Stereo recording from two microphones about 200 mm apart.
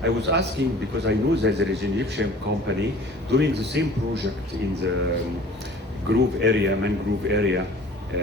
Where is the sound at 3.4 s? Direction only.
60° right (ahead or behind).